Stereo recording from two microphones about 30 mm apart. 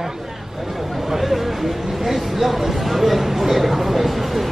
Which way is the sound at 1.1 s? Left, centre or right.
Centre.